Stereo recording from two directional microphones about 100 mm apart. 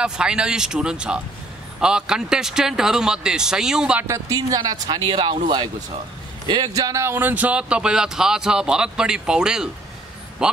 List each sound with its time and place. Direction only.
0.0 s speech: 10° right (ahead or behind)
4.1 s a man's voice: 35° right (ahead or behind)
6.7 s speech: 35° right (ahead or behind); by 10.6 s 10° right (ahead or behind)